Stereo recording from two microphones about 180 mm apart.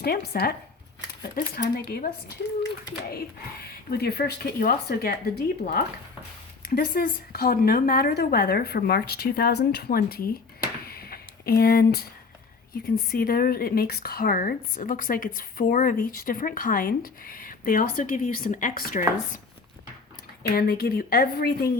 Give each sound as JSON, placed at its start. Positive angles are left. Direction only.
{"t": 0.0, "sound": "speech", "side_deg": 60}
{"t": 1.5, "sound": "speech", "side_deg": 60}
{"t": 3.9, "sound": "speech", "side_deg": 60}
{"t": 10.8, "sound": "a sound", "side_deg": 60}
{"t": 12.7, "sound": "speech", "side_deg": 55}
{"t": 20.6, "sound": "speech", "side_deg": 55}